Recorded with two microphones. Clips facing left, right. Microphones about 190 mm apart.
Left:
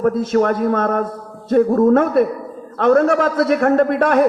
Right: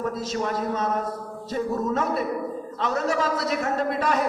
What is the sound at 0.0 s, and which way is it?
A man's voice, 60° left (ahead or behind).